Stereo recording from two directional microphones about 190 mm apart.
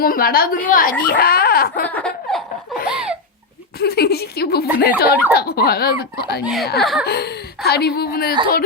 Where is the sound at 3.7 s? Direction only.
55° left (ahead or behind).